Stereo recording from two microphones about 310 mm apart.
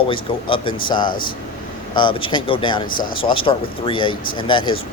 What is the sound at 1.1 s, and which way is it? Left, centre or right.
Speech, left.